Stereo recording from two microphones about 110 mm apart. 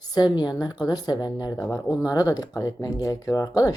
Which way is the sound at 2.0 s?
35° left (ahead or behind).